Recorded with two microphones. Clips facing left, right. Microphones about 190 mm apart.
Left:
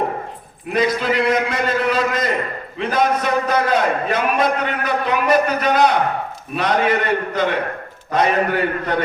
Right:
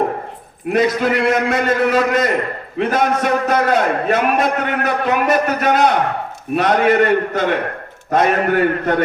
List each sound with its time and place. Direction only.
0.7 s a man's voice: 55° right (ahead or behind)